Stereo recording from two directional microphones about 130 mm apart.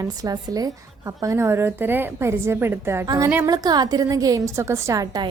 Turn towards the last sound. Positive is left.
turn(degrees=-25)  # may be behind; listen again after turning